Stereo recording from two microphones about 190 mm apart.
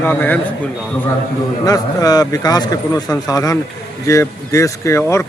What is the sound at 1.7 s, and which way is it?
A man's voice, 20° left (ahead or behind).